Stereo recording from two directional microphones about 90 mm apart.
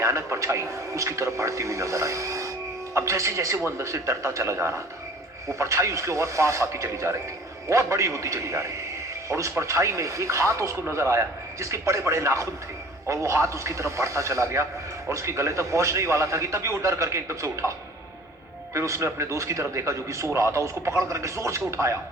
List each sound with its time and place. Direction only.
0.0 s speech: 35° right (ahead or behind)